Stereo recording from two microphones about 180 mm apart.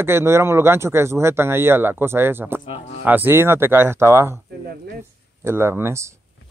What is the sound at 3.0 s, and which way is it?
A man's voice, 10° right (ahead or behind).